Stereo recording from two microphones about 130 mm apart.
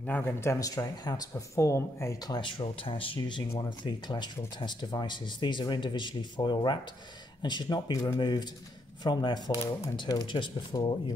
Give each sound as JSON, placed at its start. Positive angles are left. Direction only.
{"t": 0.0, "sound": "speech", "side_deg": 15}
{"t": 2.2, "sound": "speech", "side_deg": 35}